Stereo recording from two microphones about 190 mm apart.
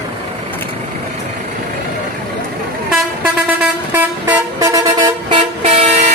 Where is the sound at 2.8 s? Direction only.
5° right (ahead or behind); by 5.4 s 20° right (ahead or behind).